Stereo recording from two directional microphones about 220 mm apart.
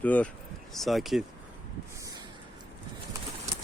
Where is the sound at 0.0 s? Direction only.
5° left (ahead or behind).